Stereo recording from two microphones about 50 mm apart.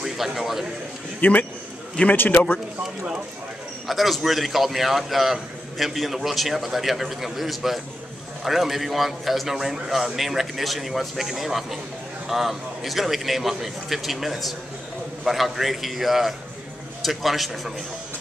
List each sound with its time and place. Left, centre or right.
0.0 s a man's voice: centre
1.2 s a man's voice: left
3.8 s a man's voice: centre